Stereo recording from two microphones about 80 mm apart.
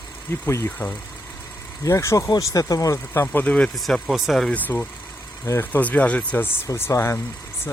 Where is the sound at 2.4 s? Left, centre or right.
Left.